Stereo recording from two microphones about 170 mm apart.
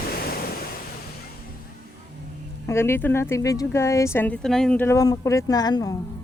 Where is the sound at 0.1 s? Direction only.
60° left (ahead or behind).